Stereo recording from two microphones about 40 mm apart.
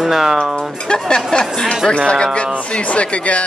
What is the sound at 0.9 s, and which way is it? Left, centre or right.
Speech, centre.